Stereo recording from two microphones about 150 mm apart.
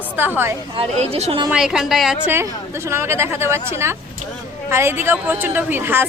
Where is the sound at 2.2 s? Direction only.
15° right (ahead or behind).